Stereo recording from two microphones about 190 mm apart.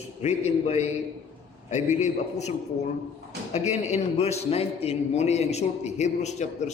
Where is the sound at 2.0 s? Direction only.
35° left (ahead or behind).